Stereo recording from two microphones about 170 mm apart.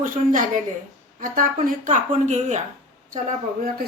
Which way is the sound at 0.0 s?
50° right (ahead or behind).